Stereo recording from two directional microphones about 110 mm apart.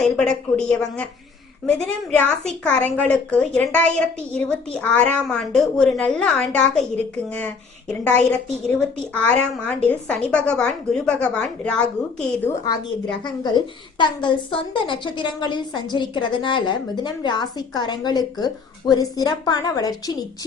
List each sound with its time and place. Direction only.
0.0 s a woman's voice: 5° left (ahead or behind)
5.2 s a woman's voice: centre (ahead or behind)
12.6 s a woman's voice: 40° left (ahead or behind)